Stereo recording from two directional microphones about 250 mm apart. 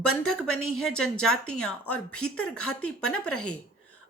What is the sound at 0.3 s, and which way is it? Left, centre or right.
Speech, left.